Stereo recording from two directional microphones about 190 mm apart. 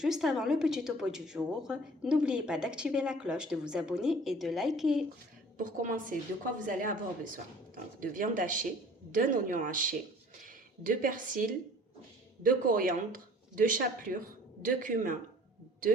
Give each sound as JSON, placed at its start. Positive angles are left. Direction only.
{"t": 0.0, "sound": "a woman's voice", "side_deg": -5}
{"t": 5.5, "sound": "a woman's voice", "side_deg": -45}